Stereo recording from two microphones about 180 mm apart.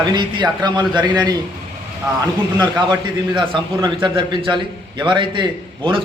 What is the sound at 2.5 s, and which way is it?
A man's voice, 25° right (ahead or behind).